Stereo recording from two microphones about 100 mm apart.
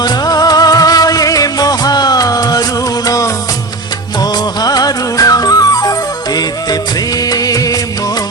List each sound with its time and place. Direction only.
0.0 s music: 40° left (ahead or behind)
4.2 s music: 40° left (ahead or behind)
7.3 s music of bollywood: 40° left (ahead or behind)